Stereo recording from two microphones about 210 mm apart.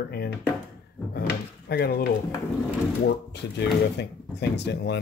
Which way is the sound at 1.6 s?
50° left (ahead or behind).